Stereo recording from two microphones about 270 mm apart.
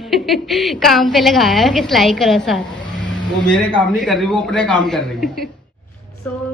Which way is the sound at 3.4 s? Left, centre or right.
Centre.